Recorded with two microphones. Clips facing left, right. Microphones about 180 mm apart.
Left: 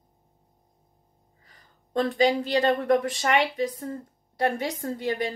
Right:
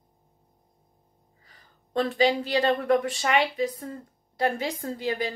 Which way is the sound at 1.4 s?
40° left (ahead or behind).